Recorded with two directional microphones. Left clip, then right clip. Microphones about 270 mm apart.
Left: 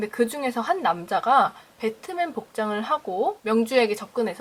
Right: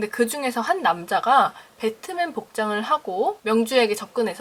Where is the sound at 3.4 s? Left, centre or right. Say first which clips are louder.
Right 2 dB; centre.